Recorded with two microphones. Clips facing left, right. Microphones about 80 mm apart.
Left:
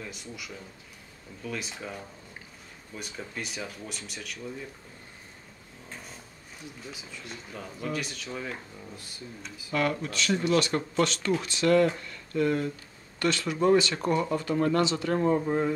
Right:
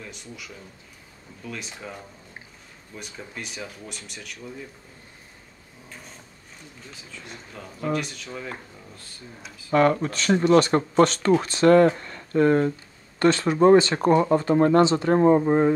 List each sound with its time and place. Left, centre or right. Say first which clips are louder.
0.0 s speech: even; centre
6.9 s speech: right 3 dB; centre
9.7 s speech: right 9 dB; right